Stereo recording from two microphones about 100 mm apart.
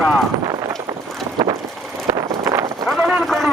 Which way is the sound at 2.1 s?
30° right (ahead or behind).